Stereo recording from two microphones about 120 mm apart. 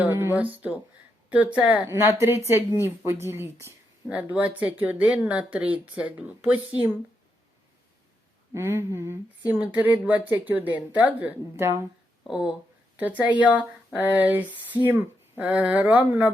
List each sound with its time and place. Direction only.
0.0 s a woman's voice: 20° right (ahead or behind)
8.5 s a woman's voice: 20° right (ahead or behind)
12.2 s speech: 5° right (ahead or behind)